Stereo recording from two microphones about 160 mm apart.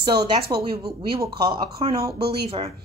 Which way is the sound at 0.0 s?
30° right (ahead or behind).